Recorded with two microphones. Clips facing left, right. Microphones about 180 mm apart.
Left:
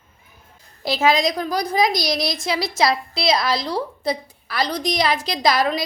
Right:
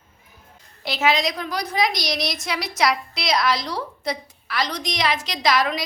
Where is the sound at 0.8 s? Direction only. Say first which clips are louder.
Left 3 dB; 40° left (ahead or behind).